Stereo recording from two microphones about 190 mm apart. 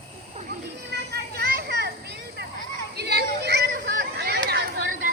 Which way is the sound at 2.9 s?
60° right (ahead or behind).